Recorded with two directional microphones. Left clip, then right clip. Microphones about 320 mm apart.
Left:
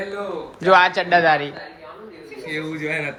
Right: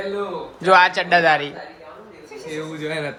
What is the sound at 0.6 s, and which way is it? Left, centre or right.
Speech, centre.